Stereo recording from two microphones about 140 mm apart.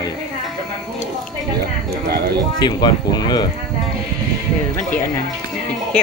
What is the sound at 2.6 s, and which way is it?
Speech, 30° left (ahead or behind).